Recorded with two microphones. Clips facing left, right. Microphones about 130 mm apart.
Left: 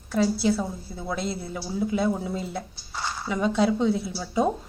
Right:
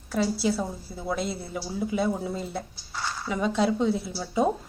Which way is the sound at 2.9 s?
15° left (ahead or behind).